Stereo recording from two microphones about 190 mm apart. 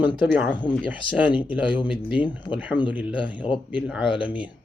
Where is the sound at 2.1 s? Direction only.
5° right (ahead or behind).